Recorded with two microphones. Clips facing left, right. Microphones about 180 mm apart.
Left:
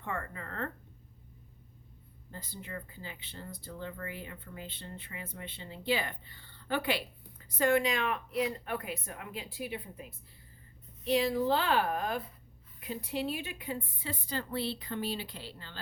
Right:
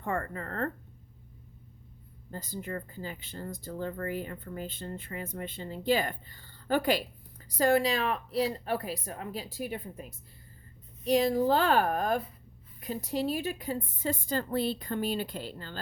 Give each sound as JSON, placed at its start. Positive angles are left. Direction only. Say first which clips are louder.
{"t": 0.0, "sound": "speech", "louder": "right 6 dB", "side_deg": -45}
{"t": 2.3, "sound": "speech", "louder": "right 6 dB", "side_deg": -45}